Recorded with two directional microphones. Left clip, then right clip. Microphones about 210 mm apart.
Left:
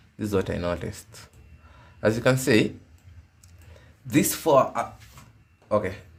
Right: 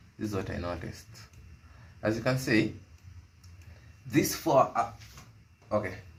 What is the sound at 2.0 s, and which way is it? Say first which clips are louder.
Speech: left 8 dB; 50° left (ahead or behind).